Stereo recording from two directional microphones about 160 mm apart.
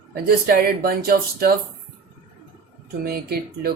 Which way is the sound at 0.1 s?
70° right (ahead or behind).